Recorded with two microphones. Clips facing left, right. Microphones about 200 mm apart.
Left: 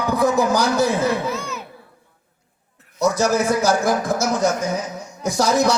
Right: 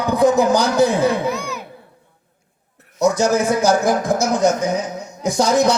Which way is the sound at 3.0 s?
15° right (ahead or behind).